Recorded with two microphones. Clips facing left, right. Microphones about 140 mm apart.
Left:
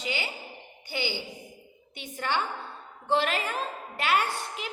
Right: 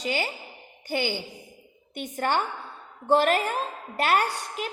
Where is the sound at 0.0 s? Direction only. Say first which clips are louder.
Right 5 dB; 45° right (ahead or behind).